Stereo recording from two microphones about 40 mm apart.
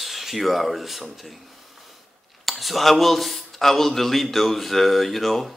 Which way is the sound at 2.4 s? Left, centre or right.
Centre.